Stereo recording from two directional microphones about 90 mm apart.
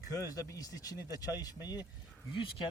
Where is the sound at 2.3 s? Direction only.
70° left (ahead or behind).